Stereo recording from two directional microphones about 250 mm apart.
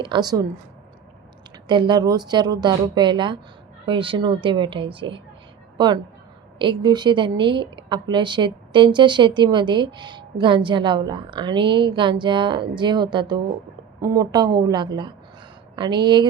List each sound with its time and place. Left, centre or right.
0.0 s a woman's voice: centre
1.6 s a woman's voice: centre